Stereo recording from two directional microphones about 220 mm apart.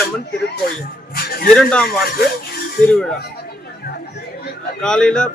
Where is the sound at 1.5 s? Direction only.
5° left (ahead or behind).